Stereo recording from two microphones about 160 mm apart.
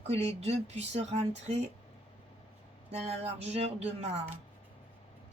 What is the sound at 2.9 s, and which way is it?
Music, 40° right (ahead or behind).